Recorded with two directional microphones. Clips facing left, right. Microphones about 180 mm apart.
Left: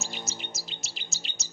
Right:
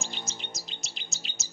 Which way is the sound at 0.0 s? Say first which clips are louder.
Left 1 dB; 5° left (ahead or behind).